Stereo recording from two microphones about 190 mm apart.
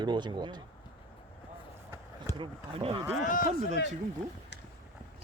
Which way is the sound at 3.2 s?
45° left (ahead or behind).